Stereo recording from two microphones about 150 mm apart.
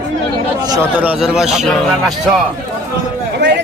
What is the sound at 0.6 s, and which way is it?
Speech, 25° right (ahead or behind).